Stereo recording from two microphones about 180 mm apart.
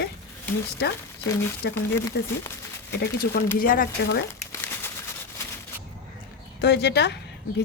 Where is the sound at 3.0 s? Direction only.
60° left (ahead or behind).